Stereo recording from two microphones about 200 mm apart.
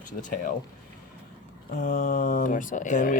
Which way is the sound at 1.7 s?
40° left (ahead or behind).